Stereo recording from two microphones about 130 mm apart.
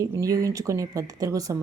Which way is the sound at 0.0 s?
25° right (ahead or behind).